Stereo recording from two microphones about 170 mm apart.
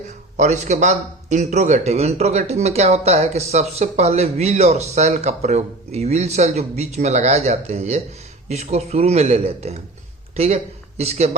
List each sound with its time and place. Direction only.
0.3 s a man's voice: 40° right (ahead or behind)